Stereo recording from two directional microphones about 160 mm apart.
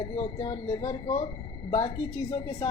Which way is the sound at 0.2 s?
25° left (ahead or behind).